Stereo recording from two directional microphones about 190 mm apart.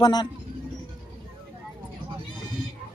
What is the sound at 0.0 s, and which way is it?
Speech, 20° left (ahead or behind).